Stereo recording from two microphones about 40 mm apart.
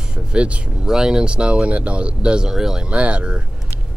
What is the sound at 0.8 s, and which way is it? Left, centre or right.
Speech, centre.